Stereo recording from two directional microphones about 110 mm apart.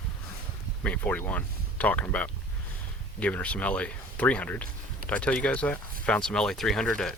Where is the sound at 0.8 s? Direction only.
10° left (ahead or behind).